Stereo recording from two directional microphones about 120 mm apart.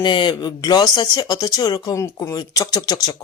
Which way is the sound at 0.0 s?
40° left (ahead or behind).